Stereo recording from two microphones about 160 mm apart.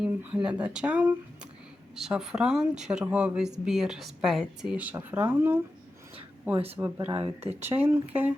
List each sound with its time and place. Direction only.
0.0 s speech: 5° right (ahead or behind)
6.7 s speech: 10° right (ahead or behind)
7.1 s speech: 35° right (ahead or behind)
7.6 s speech: 15° right (ahead or behind)